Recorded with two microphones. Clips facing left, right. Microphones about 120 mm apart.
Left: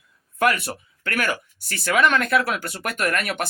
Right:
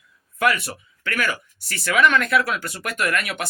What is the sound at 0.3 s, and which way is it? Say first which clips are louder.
Speech: even; 45° left (ahead or behind).